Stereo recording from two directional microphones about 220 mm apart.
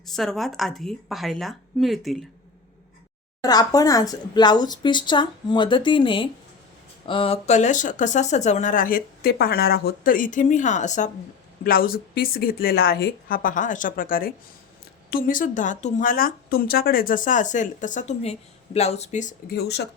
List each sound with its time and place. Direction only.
0.0 s speech: centre (ahead or behind)
3.4 s speech: 15° left (ahead or behind); by 19.9 s 50° left (ahead or behind)